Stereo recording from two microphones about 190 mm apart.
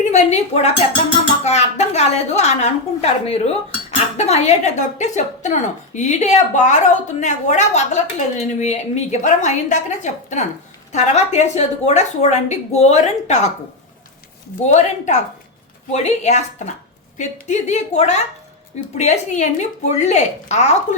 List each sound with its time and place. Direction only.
0.0 s a woman's voice: 35° left (ahead or behind)
14.7 s a woman's voice: 40° left (ahead or behind)